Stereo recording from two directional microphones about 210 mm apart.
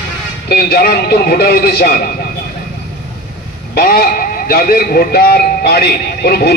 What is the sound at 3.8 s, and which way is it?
A man's voice, 50° left (ahead or behind).